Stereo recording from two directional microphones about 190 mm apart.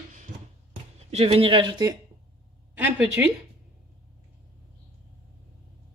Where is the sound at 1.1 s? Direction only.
30° right (ahead or behind).